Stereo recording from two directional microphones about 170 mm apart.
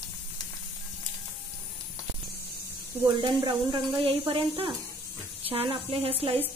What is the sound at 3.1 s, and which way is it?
Speech, 25° right (ahead or behind).